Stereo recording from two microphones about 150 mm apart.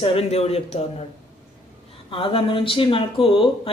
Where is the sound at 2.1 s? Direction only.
35° left (ahead or behind).